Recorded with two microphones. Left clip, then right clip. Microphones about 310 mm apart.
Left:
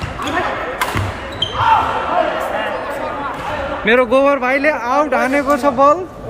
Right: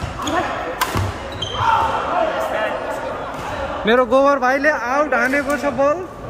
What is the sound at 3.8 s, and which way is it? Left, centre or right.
Speech, centre.